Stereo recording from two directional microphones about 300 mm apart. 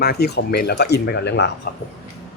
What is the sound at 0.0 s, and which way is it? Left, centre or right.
A man's voice, left.